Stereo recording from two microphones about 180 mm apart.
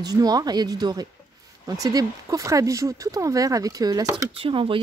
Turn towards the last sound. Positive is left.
turn(degrees=-30)  # may be behind; listen again after turning